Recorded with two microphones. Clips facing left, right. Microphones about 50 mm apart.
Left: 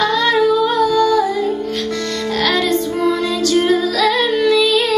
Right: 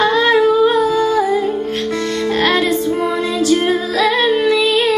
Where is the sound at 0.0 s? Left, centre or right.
Right.